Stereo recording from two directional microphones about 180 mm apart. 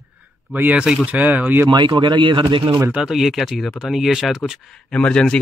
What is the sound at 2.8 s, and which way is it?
Speech, 5° right (ahead or behind).